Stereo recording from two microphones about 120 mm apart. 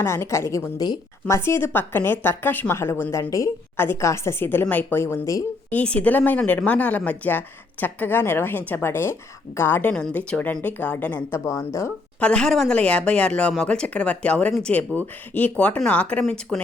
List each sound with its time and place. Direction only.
0.0 s a woman's voice: 20° left (ahead or behind)
5.7 s a woman's voice: 10° left (ahead or behind)
12.2 s speech: 5° left (ahead or behind)